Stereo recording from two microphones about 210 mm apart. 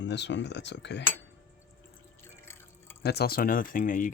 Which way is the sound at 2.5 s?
10° left (ahead or behind).